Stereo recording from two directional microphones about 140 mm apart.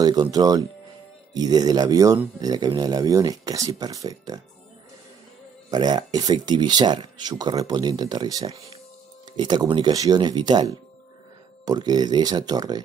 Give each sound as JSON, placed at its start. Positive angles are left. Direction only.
{"t": 0.0, "sound": "speech", "side_deg": -30}
{"t": 5.7, "sound": "speech", "side_deg": -30}